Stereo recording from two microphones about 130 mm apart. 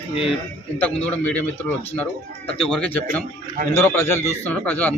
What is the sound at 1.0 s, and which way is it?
Speech, 10° left (ahead or behind).